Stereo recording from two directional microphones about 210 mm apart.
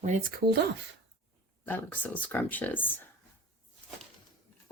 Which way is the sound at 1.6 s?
10° left (ahead or behind).